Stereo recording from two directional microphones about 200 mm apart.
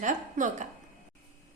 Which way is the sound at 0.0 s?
40° right (ahead or behind).